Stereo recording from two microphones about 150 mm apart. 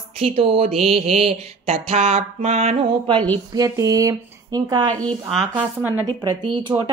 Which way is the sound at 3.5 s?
25° right (ahead or behind).